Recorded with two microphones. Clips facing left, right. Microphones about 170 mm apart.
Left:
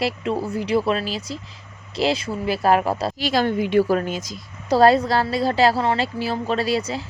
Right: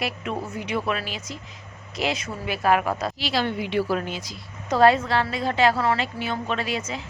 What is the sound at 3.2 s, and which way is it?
A woman's voice, 45° left (ahead or behind).